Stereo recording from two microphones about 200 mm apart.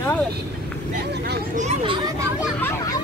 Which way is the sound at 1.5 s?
30° right (ahead or behind).